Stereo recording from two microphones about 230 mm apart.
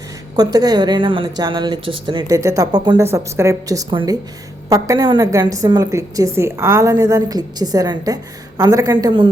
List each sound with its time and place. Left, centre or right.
0.3 s a woman's voice: centre